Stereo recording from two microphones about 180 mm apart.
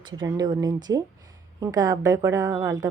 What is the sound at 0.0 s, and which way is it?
Speech, 25° right (ahead or behind).